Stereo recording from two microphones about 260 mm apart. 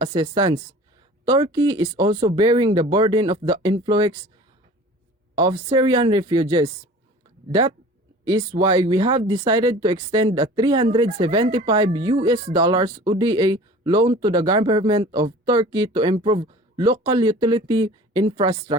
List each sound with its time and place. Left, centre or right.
0.0 s speech: centre
5.3 s speech: centre
8.3 s speech: centre